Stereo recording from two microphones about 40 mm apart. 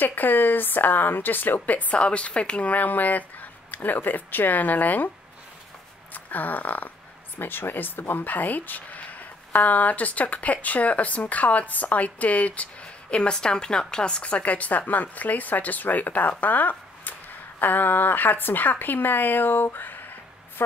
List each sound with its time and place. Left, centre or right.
0.0 s speech: left
2.0 s a woman's voice: left
2.7 s speech: left
6.1 s a sound: left
7.3 s speech: left
14.2 s a woman's voice: left